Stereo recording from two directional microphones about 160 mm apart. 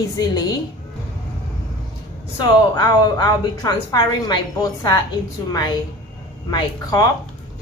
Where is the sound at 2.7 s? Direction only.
25° left (ahead or behind).